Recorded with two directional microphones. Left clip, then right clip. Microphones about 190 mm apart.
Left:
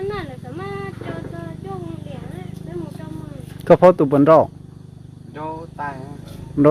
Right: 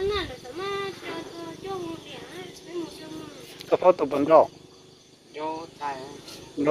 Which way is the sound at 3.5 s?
25° left (ahead or behind).